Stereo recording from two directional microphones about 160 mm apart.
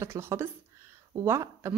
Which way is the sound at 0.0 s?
15° right (ahead or behind).